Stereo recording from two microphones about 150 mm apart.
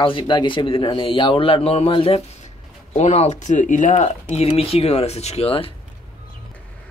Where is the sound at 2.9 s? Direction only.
50° left (ahead or behind).